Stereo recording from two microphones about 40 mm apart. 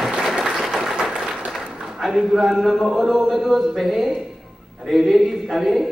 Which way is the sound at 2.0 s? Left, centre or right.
Centre.